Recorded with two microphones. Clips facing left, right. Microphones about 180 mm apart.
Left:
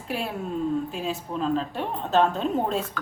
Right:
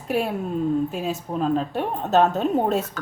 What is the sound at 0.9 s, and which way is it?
A woman's voice, 45° right (ahead or behind).